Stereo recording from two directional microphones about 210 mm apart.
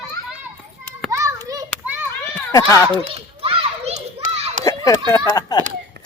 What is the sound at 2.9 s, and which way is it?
Children playing, 25° right (ahead or behind).